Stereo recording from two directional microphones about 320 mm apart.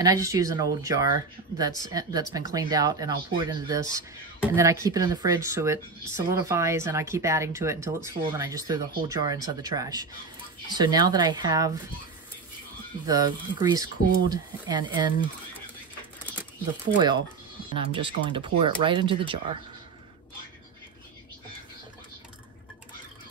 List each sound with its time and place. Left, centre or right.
0.0 s speech: centre
13.0 s speech: centre
16.3 s speech: centre